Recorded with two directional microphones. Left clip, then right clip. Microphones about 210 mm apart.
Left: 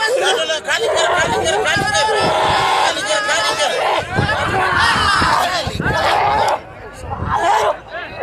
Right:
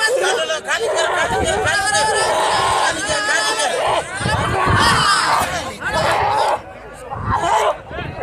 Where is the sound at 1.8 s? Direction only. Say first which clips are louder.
Left 1 dB; 50° right (ahead or behind).